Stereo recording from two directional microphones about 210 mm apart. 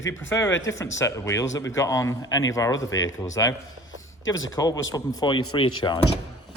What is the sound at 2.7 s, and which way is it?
Speech, 65° left (ahead or behind).